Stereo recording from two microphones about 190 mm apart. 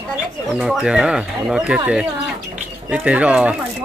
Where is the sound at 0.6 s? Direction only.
5° right (ahead or behind).